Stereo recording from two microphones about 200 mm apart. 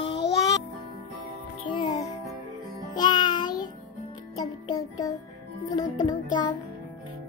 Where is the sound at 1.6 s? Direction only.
25° left (ahead or behind).